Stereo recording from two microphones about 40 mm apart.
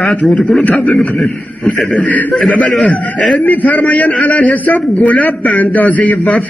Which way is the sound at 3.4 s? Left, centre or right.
Left.